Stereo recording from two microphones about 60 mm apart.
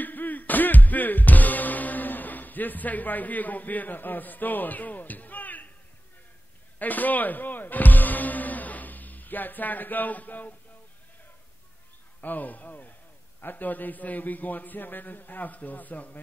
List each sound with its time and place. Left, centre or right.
0.0 s music: left
6.8 s speech: left
12.2 s a man's voice: left